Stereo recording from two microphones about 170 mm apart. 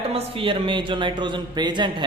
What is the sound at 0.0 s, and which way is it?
A man's voice, 35° right (ahead or behind).